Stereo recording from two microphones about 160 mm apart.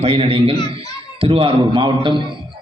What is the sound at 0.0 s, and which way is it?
A man's voice, 35° right (ahead or behind).